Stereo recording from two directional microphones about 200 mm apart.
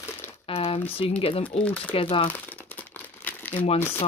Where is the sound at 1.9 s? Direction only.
25° left (ahead or behind).